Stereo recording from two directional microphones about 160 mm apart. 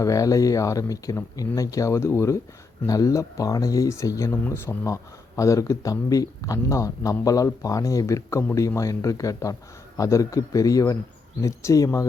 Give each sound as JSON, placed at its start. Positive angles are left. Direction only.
{"t": 0.0, "sound": "speech", "side_deg": 20}